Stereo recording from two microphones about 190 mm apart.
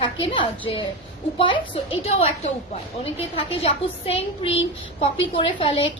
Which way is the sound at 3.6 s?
30° left (ahead or behind).